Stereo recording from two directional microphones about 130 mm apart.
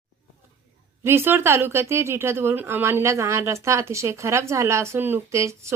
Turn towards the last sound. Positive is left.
turn(degrees=-20)  # may be behind; listen again after turning